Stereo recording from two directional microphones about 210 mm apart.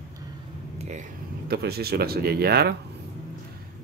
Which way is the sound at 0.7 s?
30° right (ahead or behind).